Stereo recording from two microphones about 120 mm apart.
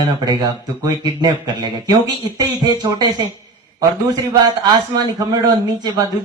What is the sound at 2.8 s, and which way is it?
Speech, 35° right (ahead or behind).